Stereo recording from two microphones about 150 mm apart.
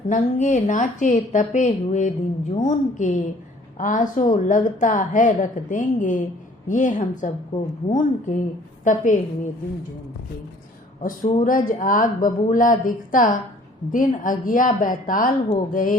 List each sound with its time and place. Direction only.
0.1 s a woman's voice: 55° left (ahead or behind)
11.0 s a woman's voice: 65° left (ahead or behind)